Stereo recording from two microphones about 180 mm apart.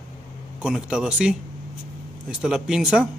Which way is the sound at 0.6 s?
5° right (ahead or behind).